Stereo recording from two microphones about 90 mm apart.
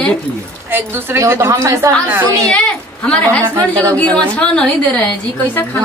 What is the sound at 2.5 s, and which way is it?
A woman's voice, 10° left (ahead or behind).